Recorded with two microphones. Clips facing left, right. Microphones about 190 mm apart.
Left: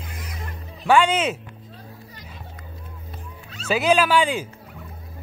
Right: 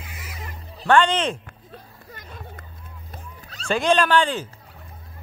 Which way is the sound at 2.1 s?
50° right (ahead or behind).